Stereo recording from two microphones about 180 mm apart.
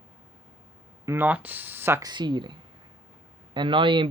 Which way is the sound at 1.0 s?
10° right (ahead or behind).